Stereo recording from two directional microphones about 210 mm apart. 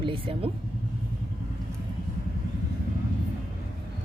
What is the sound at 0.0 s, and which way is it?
Speech, 25° right (ahead or behind).